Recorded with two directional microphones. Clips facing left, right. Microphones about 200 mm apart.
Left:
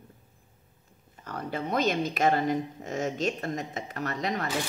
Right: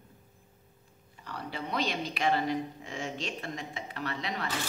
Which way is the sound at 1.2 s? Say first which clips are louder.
Left 5 dB; 45° left (ahead or behind).